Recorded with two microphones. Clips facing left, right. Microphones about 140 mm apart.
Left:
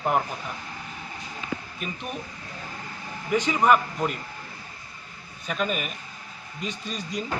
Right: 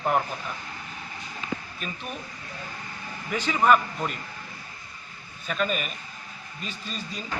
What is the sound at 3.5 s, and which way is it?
Speech, 5° left (ahead or behind).